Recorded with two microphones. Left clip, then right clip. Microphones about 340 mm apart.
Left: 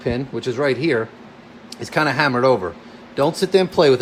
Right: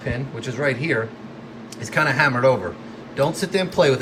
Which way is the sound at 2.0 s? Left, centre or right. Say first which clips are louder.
Even; centre.